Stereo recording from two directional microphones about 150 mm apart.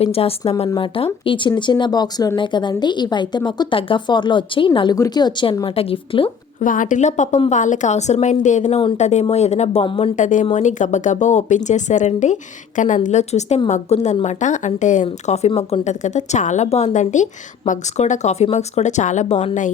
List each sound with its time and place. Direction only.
0.0 s speech: 40° left (ahead or behind)
6.6 s a woman's voice: 60° left (ahead or behind); by 10.1 s 40° left (ahead or behind)
10.2 s a woman's voice: 55° left (ahead or behind)
15.0 s speech: 45° left (ahead or behind)